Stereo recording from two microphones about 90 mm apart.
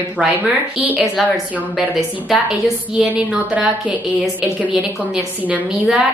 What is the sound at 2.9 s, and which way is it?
A woman's voice, 15° right (ahead or behind).